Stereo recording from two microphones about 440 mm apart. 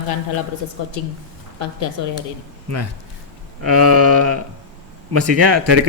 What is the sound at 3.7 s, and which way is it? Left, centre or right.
Speech, right.